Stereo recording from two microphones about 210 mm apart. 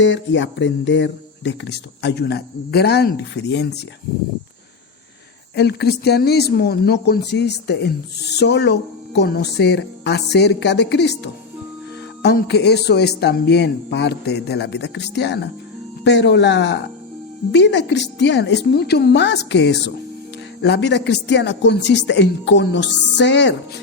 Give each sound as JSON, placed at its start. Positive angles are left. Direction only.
{"t": 0.0, "sound": "speech", "side_deg": 60}
{"t": 5.5, "sound": "speech", "side_deg": 50}